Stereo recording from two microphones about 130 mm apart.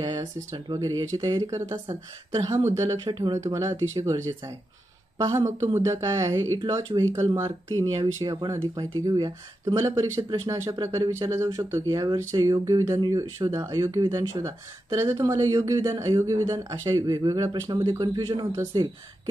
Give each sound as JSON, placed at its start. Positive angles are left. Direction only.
{"t": 0.0, "sound": "speech", "side_deg": -30}